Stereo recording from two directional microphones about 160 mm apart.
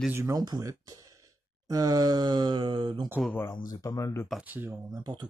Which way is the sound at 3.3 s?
15° left (ahead or behind).